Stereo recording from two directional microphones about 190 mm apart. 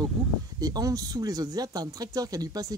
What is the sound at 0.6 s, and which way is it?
Speech, 20° right (ahead or behind).